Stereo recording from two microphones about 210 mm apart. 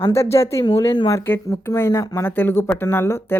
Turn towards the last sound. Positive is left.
turn(degrees=10)  # may be behind; listen again after turning